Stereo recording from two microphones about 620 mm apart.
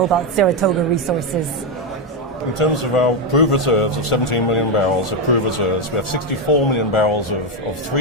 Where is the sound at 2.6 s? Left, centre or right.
Left.